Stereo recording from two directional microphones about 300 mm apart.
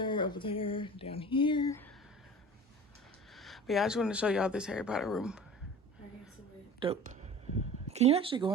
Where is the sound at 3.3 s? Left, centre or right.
Centre.